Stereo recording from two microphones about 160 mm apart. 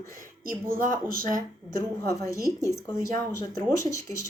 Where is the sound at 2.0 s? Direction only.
20° left (ahead or behind).